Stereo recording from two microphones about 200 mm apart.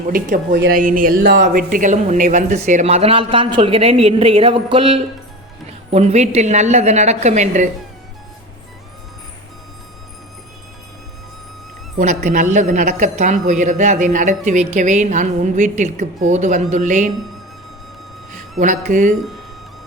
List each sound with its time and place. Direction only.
0.7 s speech: 45° right (ahead or behind)
1.4 s speech: 40° right (ahead or behind)
11.9 s speech: 40° right (ahead or behind)
18.6 s speech: 40° right (ahead or behind)